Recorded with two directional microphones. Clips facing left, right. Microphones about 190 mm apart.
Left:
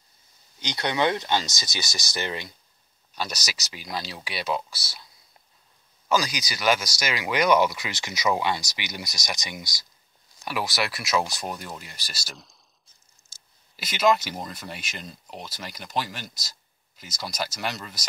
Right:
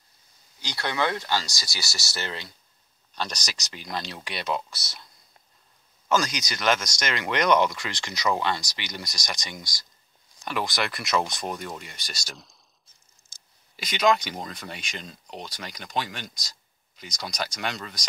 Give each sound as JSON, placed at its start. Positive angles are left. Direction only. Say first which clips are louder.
{"t": 0.6, "sound": "speech", "louder": "left 2 dB", "side_deg": 20}
{"t": 6.0, "sound": "speech", "louder": "even", "side_deg": 0}
{"t": 13.7, "sound": "speech", "louder": "left 1 dB", "side_deg": 5}